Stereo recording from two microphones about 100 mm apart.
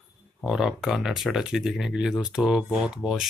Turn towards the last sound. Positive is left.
turn(degrees=-5)  # may be behind; listen again after turning